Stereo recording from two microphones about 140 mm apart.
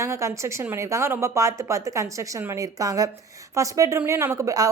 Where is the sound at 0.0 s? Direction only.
20° right (ahead or behind).